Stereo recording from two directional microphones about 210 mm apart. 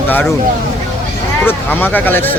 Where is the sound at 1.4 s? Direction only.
10° left (ahead or behind).